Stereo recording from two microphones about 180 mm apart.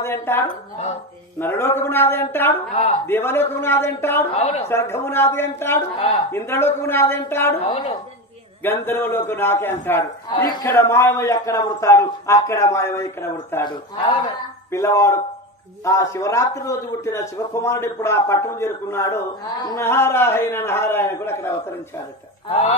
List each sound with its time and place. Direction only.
0.0 s a man's voice: 15° left (ahead or behind)
2.7 s a woman's voice: 35° left (ahead or behind)
3.1 s a man's voice: 15° left (ahead or behind)
4.3 s a woman's voice: 35° left (ahead or behind)
4.6 s a man's voice: 15° left (ahead or behind)
7.6 s a woman's voice: 35° left (ahead or behind)
8.6 s a man's voice: 10° left (ahead or behind)
22.5 s a woman's voice: 35° left (ahead or behind)